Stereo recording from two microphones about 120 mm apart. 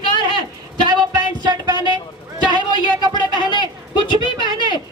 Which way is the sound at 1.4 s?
35° right (ahead or behind).